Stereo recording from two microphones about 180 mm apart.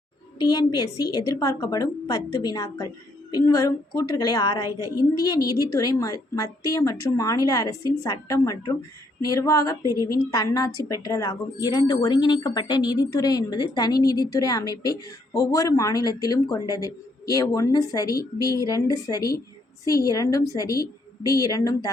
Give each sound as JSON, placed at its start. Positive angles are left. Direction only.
{"t": 0.3, "sound": "a woman's voice", "side_deg": 25}
{"t": 9.2, "sound": "female singing", "side_deg": 20}
{"t": 9.8, "sound": "a woman's voice", "side_deg": -20}
{"t": 10.1, "sound": "a woman's voice", "side_deg": 20}